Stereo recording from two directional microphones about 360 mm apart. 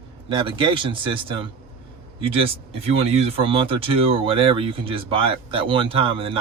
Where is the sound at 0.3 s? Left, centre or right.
Centre.